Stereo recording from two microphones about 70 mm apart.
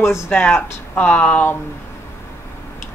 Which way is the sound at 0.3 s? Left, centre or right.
Left.